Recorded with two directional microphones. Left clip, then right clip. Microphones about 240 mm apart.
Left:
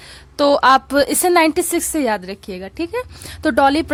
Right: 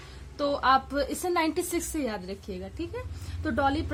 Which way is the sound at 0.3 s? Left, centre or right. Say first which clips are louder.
Left 12 dB; left.